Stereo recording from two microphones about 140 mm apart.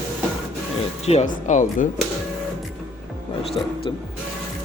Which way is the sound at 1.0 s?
55° left (ahead or behind).